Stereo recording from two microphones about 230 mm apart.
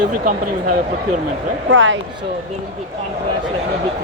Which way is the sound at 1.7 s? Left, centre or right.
Right.